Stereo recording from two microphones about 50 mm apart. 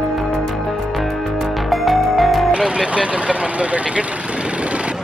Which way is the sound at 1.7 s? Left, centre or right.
Centre.